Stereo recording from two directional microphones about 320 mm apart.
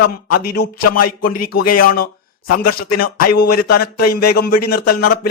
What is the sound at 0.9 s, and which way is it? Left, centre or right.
Speech, left.